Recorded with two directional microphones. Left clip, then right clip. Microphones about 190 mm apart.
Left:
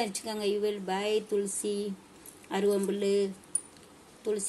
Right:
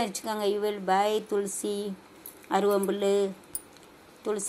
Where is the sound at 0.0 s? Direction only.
15° right (ahead or behind).